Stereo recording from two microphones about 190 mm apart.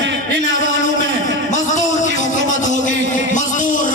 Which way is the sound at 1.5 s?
40° left (ahead or behind).